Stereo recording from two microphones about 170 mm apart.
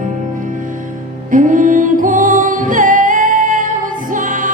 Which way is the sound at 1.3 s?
50° right (ahead or behind).